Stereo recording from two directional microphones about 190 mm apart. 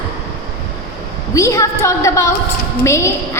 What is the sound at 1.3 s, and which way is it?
A woman's voice, 15° left (ahead or behind).